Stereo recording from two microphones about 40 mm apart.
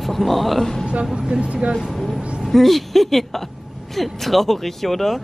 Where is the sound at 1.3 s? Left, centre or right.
Right.